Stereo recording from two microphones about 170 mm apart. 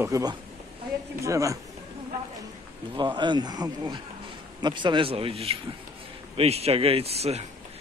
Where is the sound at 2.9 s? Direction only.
25° right (ahead or behind).